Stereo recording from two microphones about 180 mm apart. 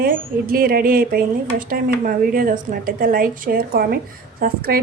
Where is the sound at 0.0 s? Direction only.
55° right (ahead or behind).